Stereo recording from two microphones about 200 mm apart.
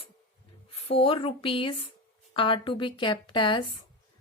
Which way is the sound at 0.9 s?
30° left (ahead or behind).